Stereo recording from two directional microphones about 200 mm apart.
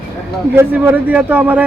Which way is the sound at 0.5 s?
10° right (ahead or behind).